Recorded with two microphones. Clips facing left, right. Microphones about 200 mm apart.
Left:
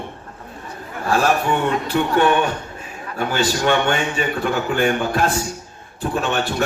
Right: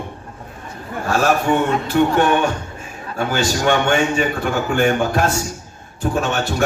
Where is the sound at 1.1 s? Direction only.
45° right (ahead or behind).